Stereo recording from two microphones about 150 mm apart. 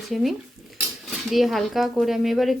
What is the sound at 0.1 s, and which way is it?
Speech, centre (ahead or behind).